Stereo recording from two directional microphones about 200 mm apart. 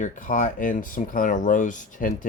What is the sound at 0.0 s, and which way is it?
Speech, 40° left (ahead or behind).